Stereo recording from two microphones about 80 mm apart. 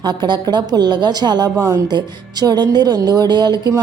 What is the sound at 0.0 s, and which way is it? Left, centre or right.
Speech, right.